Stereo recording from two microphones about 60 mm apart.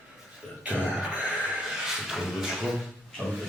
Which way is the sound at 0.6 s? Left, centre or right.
Centre.